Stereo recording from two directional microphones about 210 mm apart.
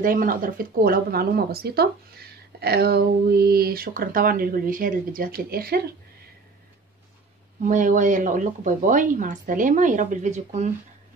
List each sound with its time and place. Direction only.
0.0 s speech: 40° right (ahead or behind)
7.6 s speech: 35° right (ahead or behind)